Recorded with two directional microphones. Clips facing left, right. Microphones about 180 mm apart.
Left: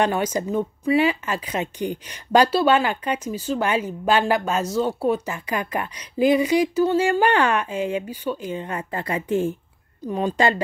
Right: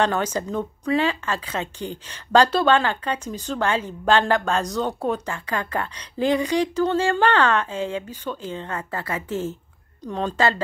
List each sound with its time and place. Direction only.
0.0 s a woman's voice: 10° left (ahead or behind)